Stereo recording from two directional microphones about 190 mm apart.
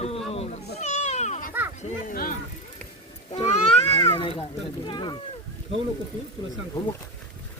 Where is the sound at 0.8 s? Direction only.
35° left (ahead or behind).